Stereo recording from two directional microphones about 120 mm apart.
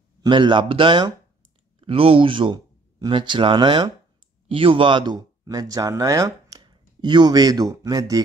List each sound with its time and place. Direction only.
0.2 s speech: 40° right (ahead or behind)